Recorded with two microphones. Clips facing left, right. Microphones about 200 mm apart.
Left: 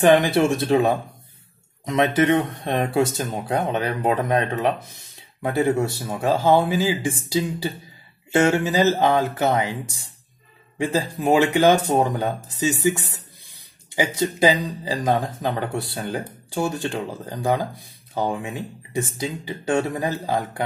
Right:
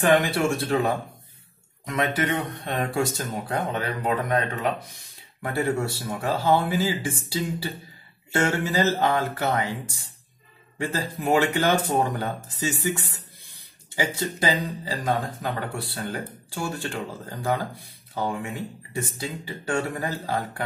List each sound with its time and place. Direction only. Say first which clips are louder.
0.6 s speech: left 5 dB; 20° left (ahead or behind)
10.8 s speech: left 5 dB; 15° left (ahead or behind)